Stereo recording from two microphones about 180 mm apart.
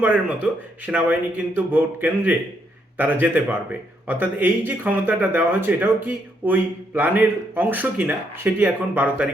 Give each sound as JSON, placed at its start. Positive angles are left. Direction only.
{"t": 0.0, "sound": "speech", "side_deg": -10}